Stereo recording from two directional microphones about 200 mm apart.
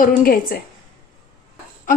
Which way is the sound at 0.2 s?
45° left (ahead or behind).